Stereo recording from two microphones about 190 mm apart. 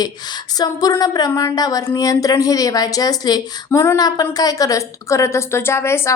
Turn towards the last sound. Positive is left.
turn(degrees=15)  # may be behind; listen again after turning